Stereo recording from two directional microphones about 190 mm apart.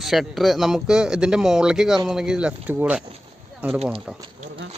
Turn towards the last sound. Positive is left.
turn(degrees=-5)  # may be behind; listen again after turning